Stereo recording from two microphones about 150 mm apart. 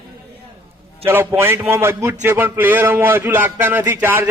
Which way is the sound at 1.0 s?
15° right (ahead or behind).